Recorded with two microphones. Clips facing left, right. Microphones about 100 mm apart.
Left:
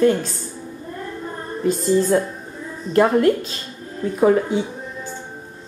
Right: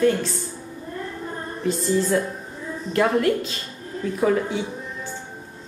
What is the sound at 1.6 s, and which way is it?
Speech, 50° left (ahead or behind).